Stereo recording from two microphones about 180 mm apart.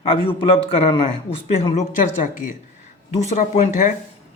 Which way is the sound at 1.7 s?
45° left (ahead or behind).